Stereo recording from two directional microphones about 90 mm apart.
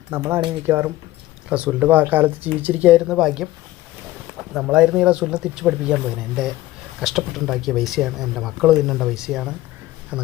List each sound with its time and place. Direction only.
0.1 s speech: 30° right (ahead or behind)
1.5 s speech: 15° right (ahead or behind)